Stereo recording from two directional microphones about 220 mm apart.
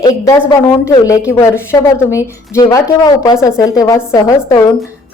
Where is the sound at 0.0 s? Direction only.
15° left (ahead or behind).